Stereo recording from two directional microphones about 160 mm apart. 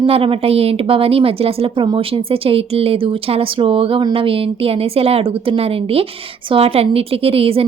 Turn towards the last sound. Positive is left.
turn(degrees=-35)  # may be behind; listen again after turning